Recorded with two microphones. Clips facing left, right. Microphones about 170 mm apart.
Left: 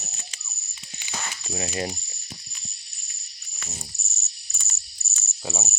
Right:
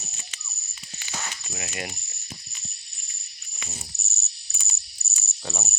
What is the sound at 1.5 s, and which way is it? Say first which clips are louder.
Speech: left 9 dB; 30° left (ahead or behind).